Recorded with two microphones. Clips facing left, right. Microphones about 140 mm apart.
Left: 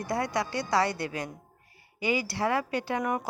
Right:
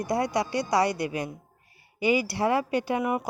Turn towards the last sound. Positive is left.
turn(degrees=-10)  # may be behind; listen again after turning